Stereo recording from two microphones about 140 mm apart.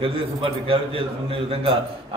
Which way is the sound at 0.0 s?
40° right (ahead or behind).